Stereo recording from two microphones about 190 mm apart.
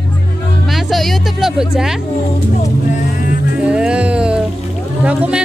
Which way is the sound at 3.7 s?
5° right (ahead or behind).